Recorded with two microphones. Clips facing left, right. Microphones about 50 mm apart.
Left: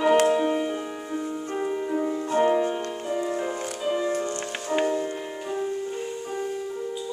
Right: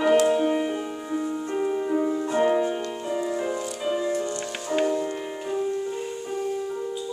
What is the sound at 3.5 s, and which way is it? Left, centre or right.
Music, left.